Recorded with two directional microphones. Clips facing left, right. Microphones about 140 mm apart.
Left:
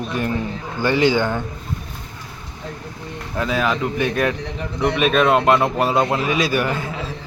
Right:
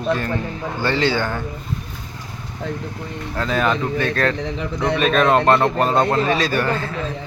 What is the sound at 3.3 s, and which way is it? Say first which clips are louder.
A man's voice: right 1 dB; 10° left (ahead or behind).